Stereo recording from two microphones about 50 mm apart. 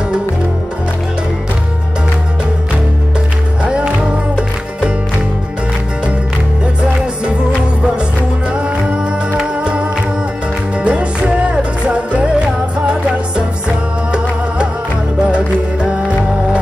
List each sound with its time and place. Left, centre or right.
3.6 s music: right
6.8 s music: right